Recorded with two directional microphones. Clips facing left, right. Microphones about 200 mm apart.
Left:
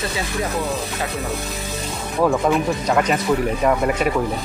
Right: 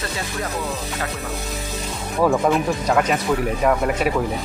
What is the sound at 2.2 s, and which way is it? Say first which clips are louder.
Speech: even; centre (ahead or behind).